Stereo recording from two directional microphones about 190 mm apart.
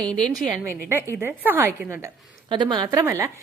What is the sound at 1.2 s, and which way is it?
Speech, 10° right (ahead or behind).